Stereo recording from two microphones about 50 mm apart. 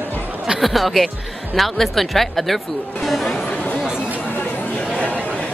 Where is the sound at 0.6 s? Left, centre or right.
Centre.